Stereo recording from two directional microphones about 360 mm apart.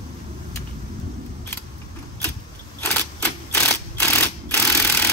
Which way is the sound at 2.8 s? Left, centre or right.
Centre.